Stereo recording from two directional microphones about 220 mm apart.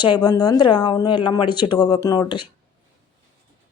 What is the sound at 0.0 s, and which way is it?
Speech, 20° left (ahead or behind).